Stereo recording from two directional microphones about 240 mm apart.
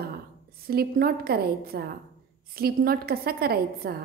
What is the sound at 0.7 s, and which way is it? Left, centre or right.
A woman's voice, right.